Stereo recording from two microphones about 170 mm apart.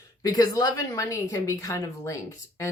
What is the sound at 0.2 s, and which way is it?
A woman's voice, 20° left (ahead or behind).